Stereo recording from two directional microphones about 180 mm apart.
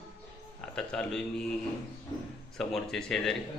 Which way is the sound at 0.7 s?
5° left (ahead or behind).